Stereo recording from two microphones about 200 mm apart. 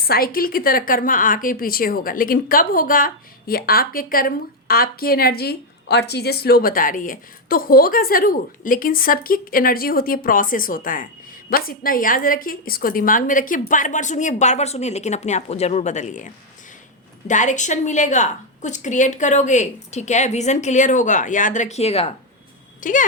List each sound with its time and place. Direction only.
0.0 s a woman's voice: 50° left (ahead or behind)